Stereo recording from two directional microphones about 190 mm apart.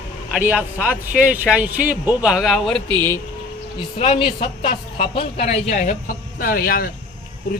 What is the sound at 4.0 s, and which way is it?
A woman's voice, 30° left (ahead or behind).